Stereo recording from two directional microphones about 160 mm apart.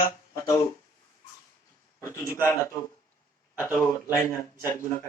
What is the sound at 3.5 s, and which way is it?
Speech, 20° left (ahead or behind).